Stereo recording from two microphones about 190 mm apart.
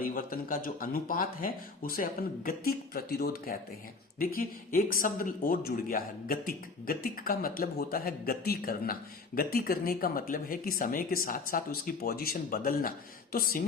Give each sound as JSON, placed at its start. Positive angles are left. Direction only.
{"t": 0.0, "sound": "speech", "side_deg": 50}